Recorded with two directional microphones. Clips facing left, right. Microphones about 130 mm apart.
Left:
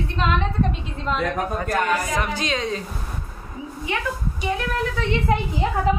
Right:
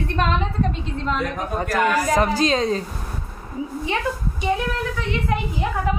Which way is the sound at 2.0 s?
35° right (ahead or behind).